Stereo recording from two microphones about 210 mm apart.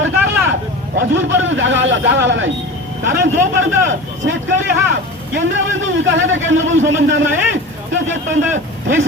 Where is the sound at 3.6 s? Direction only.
65° right (ahead or behind).